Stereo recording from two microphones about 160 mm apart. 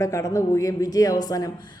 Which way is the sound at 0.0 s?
20° left (ahead or behind).